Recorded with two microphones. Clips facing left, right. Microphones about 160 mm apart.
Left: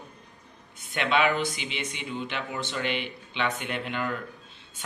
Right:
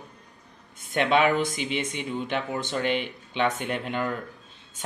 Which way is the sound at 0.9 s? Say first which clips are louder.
Right 3 dB; 45° right (ahead or behind).